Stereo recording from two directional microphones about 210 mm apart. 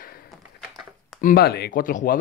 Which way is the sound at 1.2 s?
45° left (ahead or behind).